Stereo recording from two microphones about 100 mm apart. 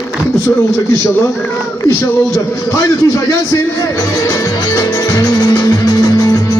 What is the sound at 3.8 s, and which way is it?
Music, 35° left (ahead or behind).